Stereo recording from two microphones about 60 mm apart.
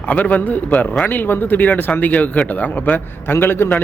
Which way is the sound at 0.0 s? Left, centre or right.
Left.